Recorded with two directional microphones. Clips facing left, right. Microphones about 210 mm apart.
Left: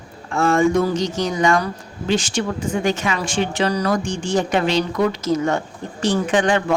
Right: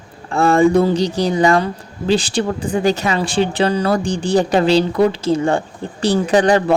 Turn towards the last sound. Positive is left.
turn(degrees=-35)  # may be behind; listen again after turning